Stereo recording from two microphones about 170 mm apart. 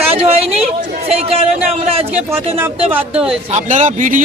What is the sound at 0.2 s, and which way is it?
Speech, 35° right (ahead or behind).